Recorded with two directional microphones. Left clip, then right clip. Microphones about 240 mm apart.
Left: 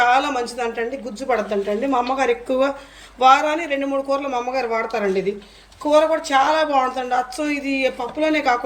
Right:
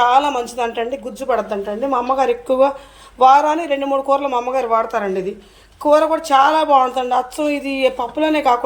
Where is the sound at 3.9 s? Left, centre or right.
Right.